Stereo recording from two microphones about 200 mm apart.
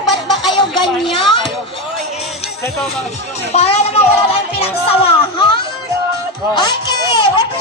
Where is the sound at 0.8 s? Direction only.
Centre (ahead or behind).